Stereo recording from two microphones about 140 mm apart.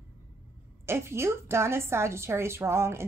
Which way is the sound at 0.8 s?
20° right (ahead or behind).